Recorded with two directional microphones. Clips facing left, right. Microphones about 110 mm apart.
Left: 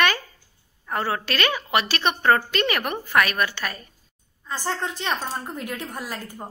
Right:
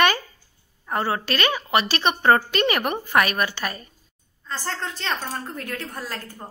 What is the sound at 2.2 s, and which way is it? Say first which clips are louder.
A woman's voice: right 2 dB; 15° right (ahead or behind).